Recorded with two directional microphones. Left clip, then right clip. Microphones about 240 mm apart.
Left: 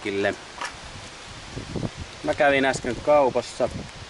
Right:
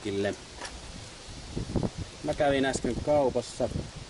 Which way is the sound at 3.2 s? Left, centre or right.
Centre.